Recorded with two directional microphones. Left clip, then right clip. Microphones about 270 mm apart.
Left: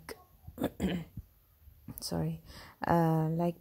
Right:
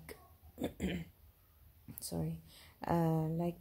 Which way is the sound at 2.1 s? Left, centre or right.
Centre.